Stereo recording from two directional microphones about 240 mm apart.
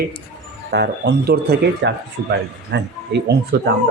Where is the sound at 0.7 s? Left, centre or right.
Right.